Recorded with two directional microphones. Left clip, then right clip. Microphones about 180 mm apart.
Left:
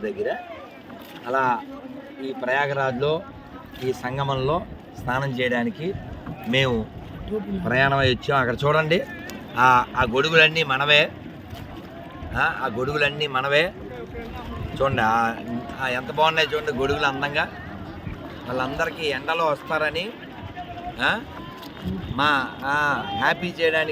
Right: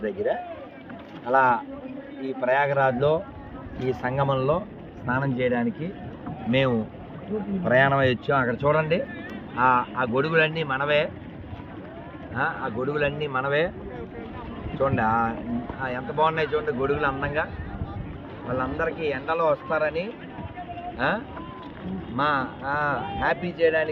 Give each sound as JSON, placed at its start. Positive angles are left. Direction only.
{"t": 0.0, "sound": "a man's voice", "side_deg": -5}
{"t": 5.0, "sound": "a man's voice", "side_deg": 55}
{"t": 6.5, "sound": "speech", "side_deg": 15}
{"t": 7.6, "sound": "a man's voice", "side_deg": 0}
{"t": 8.4, "sound": "speech", "side_deg": 60}
{"t": 9.6, "sound": "speech", "side_deg": 70}
{"t": 12.3, "sound": "a man's voice", "side_deg": 65}
{"t": 14.8, "sound": "a man's voice", "side_deg": 60}